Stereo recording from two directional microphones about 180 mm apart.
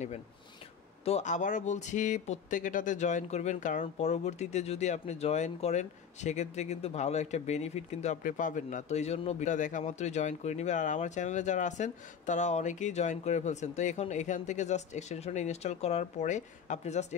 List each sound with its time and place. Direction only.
1.0 s speech: 40° left (ahead or behind)